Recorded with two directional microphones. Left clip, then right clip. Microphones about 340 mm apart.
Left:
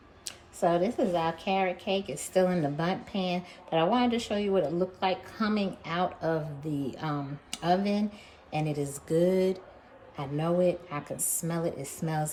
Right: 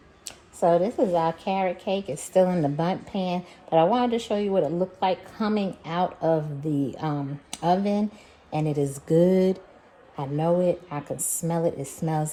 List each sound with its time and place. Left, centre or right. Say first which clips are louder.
0.3 s speech: right 6 dB; centre